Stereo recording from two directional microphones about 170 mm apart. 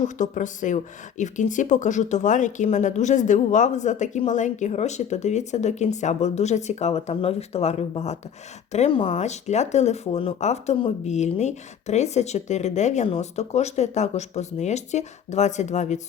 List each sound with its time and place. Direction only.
0.2 s speech: 45° left (ahead or behind)